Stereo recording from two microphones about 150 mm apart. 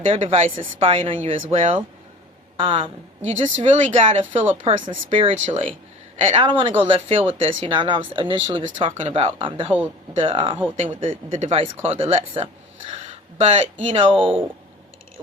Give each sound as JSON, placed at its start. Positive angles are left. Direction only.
{"t": 0.1, "sound": "speech", "side_deg": -40}